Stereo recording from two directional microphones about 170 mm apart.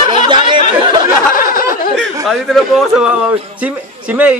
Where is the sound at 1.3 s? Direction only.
55° left (ahead or behind).